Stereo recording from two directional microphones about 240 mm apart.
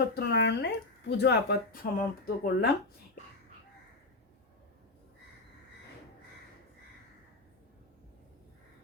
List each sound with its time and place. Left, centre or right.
0.1 s speech: left